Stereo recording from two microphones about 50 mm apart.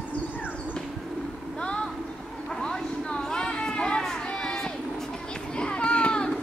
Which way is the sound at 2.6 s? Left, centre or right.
Centre.